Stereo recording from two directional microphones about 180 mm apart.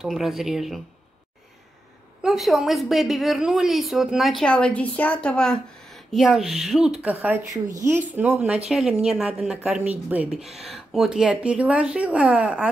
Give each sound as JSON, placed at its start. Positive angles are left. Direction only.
{"t": 0.0, "sound": "a woman's voice", "side_deg": 0}
{"t": 2.2, "sound": "a woman's voice", "side_deg": 0}